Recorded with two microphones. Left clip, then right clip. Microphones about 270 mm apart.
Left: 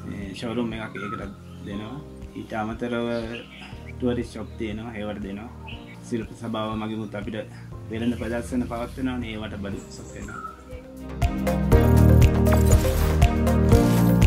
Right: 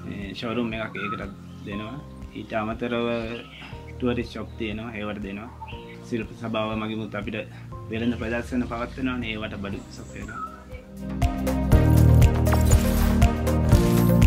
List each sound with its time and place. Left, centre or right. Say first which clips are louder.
0.3 s speech: right 1 dB; left
2.5 s speech: right 1 dB; left
11.1 s music: left 1 dB; centre